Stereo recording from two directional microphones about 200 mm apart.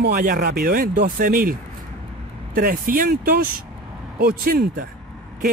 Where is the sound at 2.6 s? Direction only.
45° right (ahead or behind).